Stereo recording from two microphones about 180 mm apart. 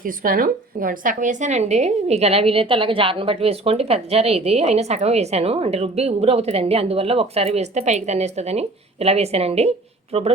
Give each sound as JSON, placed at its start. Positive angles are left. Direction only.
{"t": 0.0, "sound": "speech", "side_deg": -50}